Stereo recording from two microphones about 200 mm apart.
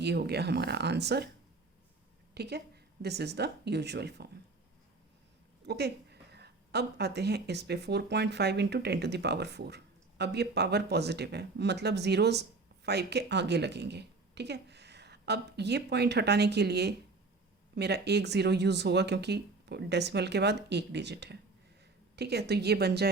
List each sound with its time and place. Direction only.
0.0 s speech: 55° right (ahead or behind)
2.3 s speech: 55° right (ahead or behind)
5.6 s a woman's voice: 55° right (ahead or behind)